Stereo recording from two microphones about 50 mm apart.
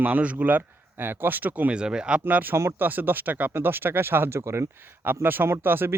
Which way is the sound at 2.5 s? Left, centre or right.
Right.